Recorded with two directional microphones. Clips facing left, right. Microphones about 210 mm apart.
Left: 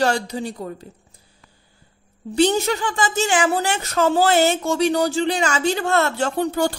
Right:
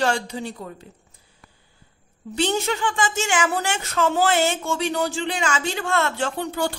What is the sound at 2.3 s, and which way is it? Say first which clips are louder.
Speech: left 5 dB; 40° left (ahead or behind).